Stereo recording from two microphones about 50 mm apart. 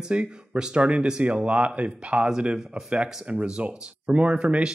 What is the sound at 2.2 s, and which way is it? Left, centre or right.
Speech, centre.